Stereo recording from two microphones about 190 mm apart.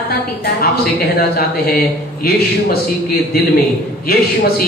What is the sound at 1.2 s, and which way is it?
A man's voice, 55° left (ahead or behind).